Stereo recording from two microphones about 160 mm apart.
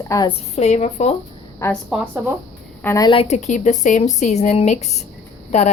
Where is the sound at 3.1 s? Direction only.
40° left (ahead or behind).